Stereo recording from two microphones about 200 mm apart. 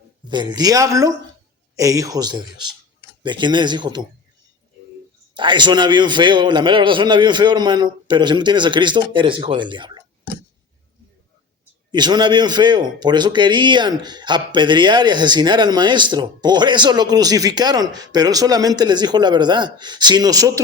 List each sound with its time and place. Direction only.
0.3 s a man's voice: 20° right (ahead or behind)
5.3 s a man's voice: 25° right (ahead or behind)
11.9 s a man's voice: 20° right (ahead or behind)